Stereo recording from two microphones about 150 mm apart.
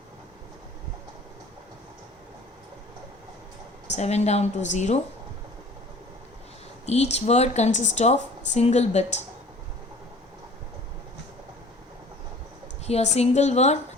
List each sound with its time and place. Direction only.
3.9 s speech: 45° left (ahead or behind)
6.8 s speech: 45° left (ahead or behind)
12.8 s speech: 45° left (ahead or behind)